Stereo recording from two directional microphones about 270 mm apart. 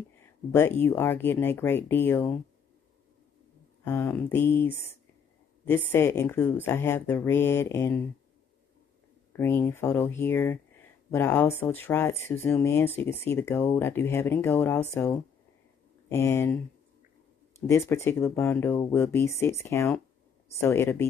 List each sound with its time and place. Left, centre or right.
0.5 s speech: centre
3.8 s speech: centre
9.4 s speech: centre
16.1 s speech: centre
17.6 s speech: centre